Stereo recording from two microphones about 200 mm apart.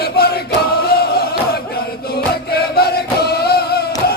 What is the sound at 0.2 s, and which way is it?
Chant, 50° left (ahead or behind).